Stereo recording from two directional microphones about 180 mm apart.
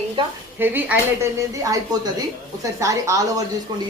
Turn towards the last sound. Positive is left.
turn(degrees=-15)  # may be behind; listen again after turning